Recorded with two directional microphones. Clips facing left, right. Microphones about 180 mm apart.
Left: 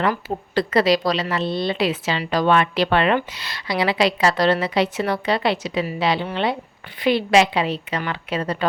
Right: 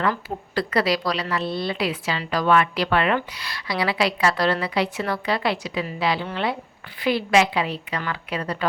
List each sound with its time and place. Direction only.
0.0 s speech: 20° left (ahead or behind)